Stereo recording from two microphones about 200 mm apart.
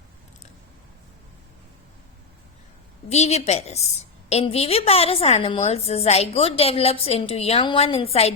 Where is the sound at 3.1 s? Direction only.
35° left (ahead or behind).